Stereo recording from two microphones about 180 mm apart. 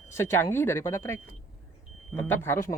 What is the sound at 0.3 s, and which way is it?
Speech, 15° left (ahead or behind).